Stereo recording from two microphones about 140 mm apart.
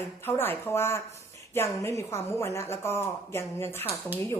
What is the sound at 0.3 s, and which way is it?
A woman's voice, 15° left (ahead or behind).